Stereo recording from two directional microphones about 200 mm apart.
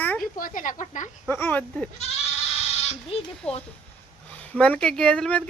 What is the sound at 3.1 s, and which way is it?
Speech, 30° left (ahead or behind).